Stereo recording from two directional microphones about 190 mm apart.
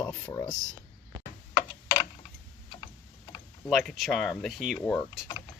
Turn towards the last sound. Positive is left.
turn(degrees=5)  # may be behind; listen again after turning